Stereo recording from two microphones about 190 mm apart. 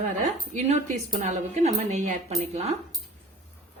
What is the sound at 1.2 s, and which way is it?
Speech, 35° right (ahead or behind).